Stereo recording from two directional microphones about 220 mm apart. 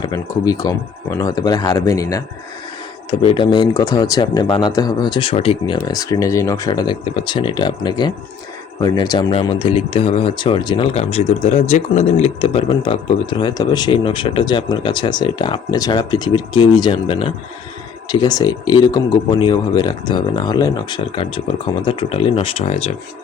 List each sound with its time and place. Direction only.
0.0 s speech: 15° left (ahead or behind)